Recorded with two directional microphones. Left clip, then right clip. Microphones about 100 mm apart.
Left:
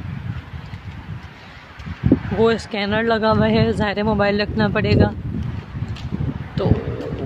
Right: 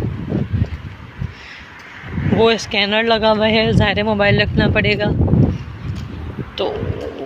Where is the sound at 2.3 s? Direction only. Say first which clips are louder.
Right 7 dB; 15° left (ahead or behind).